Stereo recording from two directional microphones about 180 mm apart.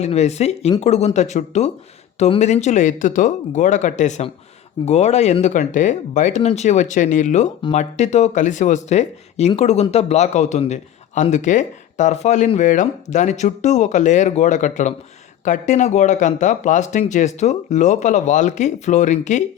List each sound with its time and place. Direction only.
0.0 s a man's voice: 40° left (ahead or behind)